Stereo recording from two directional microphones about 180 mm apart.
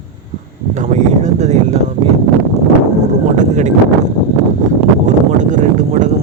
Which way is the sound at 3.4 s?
40° right (ahead or behind).